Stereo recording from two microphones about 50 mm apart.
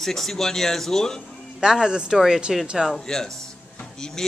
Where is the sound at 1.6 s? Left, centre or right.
Centre.